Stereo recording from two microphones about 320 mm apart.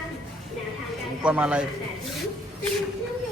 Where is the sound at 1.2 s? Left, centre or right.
Centre.